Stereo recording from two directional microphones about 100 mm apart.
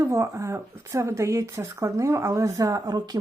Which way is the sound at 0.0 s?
30° right (ahead or behind).